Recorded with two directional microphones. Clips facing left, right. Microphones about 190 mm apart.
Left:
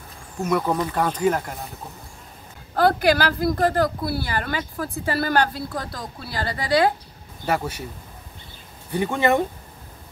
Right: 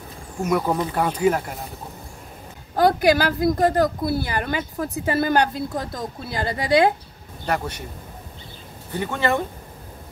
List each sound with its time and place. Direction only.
0.4 s speech: 10° right (ahead or behind)
2.7 s a woman's voice: 20° right (ahead or behind)
7.4 s speech: 5° left (ahead or behind)
8.9 s speech: 15° left (ahead or behind)